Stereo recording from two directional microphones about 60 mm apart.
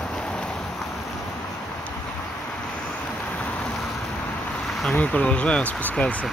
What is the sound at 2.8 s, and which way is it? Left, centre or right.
Vehicle, left.